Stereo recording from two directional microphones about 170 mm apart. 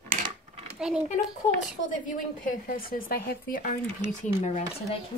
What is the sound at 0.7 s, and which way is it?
Speech, 5° right (ahead or behind).